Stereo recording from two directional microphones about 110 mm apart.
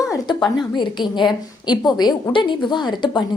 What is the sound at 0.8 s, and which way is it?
A woman's voice, 45° left (ahead or behind).